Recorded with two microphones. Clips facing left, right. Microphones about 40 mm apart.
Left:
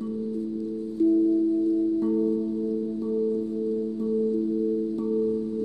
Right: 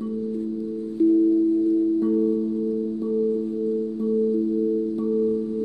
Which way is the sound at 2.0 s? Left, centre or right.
Centre.